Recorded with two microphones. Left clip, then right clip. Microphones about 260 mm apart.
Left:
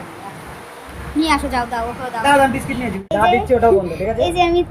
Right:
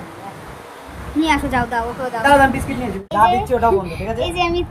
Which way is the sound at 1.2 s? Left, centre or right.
Centre.